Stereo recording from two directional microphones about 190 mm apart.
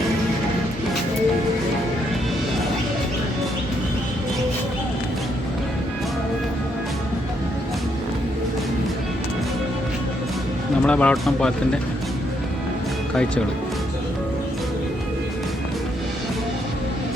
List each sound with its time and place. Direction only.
10.8 s speech: 5° left (ahead or behind)